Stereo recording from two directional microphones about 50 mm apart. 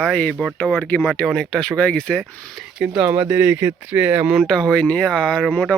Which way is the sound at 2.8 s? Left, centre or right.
Right.